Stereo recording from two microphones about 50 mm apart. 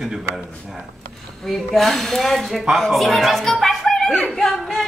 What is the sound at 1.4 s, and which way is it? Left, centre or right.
Speech, centre.